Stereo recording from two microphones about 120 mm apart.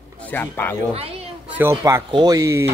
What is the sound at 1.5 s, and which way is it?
Speech, 20° right (ahead or behind).